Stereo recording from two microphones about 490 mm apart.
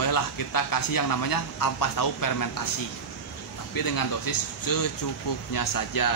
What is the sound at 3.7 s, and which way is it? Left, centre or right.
Speech, left.